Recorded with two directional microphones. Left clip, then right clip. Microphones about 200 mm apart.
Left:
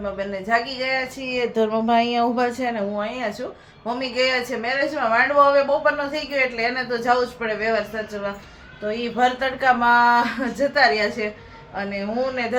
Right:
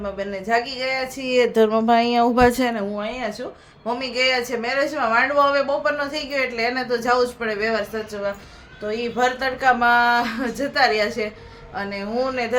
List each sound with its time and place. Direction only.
0.0 s speech: 10° right (ahead or behind)
1.2 s speech: 45° right (ahead or behind)
1.5 s speech: 25° right (ahead or behind)
2.5 s speech: 50° right (ahead or behind)
2.9 s speech: 5° right (ahead or behind)
8.9 s speech: 10° right (ahead or behind)